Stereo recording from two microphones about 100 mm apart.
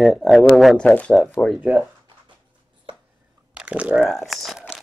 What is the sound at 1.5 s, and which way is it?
Speech, 15° right (ahead or behind).